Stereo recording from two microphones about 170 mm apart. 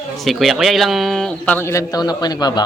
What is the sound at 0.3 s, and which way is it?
A man's voice, centre (ahead or behind).